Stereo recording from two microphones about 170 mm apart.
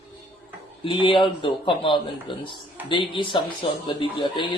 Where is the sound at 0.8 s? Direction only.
30° left (ahead or behind).